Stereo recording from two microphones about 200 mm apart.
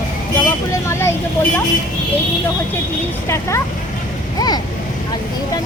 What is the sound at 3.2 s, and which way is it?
Speech, 15° left (ahead or behind).